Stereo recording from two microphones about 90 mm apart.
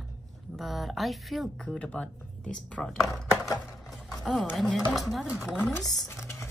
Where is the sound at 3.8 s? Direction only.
5° left (ahead or behind).